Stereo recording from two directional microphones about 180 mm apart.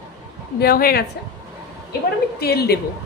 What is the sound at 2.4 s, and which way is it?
Speech, 60° left (ahead or behind).